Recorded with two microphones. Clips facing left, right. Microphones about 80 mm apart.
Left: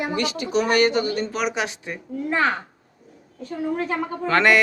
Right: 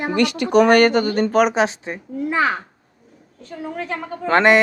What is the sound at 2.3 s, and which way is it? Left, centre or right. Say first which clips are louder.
Speech: right 2 dB; centre.